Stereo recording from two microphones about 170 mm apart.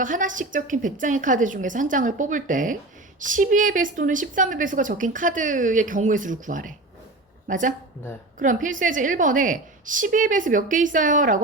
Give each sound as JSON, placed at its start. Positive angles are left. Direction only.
{"t": 0.0, "sound": "speech", "side_deg": -50}